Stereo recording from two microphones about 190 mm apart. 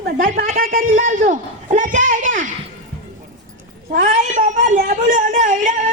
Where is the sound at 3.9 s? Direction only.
45° right (ahead or behind).